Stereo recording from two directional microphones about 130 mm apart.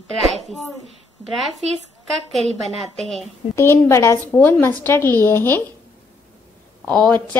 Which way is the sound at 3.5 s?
20° left (ahead or behind).